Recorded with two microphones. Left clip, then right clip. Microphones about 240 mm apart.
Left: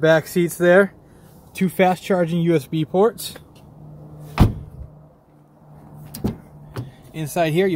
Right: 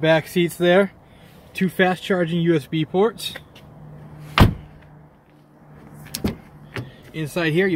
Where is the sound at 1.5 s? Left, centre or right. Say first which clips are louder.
Left 2 dB; centre.